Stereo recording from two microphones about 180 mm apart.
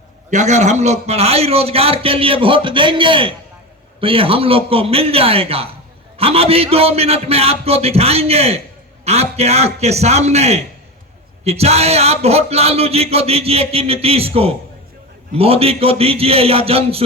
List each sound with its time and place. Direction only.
0.3 s a man's voice: 40° right (ahead or behind)